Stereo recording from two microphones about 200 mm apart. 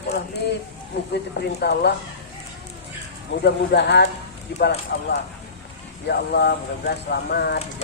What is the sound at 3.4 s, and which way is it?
Speech, 55° left (ahead or behind).